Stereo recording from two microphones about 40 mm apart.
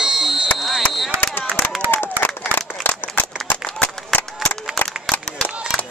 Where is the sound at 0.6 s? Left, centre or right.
Centre.